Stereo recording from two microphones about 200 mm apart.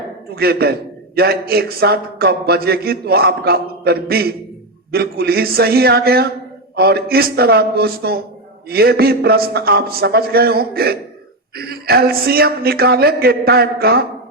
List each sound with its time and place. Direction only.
0.3 s a man's voice: 50° right (ahead or behind)